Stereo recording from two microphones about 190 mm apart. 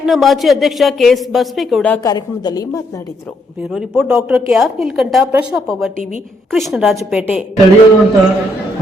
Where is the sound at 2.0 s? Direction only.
20° left (ahead or behind).